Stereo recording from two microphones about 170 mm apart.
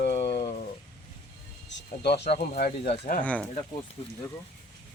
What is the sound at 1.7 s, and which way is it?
Speech, 85° left.